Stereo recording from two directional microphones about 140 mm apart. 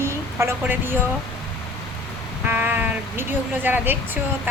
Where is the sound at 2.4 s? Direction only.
15° right (ahead or behind).